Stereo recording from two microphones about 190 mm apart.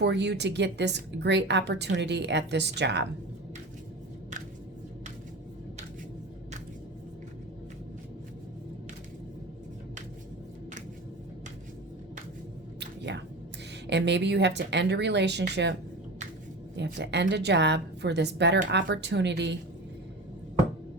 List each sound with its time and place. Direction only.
0.0 s a woman's voice: 65° right (ahead or behind)
12.8 s squish: 65° right (ahead or behind)
13.8 s a woman's voice: 65° right (ahead or behind)
16.7 s a woman's voice: 65° right (ahead or behind)